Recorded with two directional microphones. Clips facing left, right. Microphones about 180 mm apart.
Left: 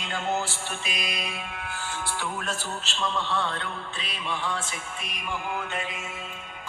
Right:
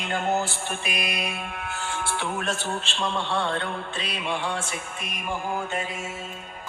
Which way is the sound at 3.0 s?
70° right (ahead or behind).